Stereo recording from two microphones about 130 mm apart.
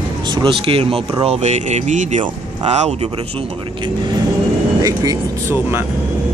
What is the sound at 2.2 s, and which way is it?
Speech, 55° right (ahead or behind).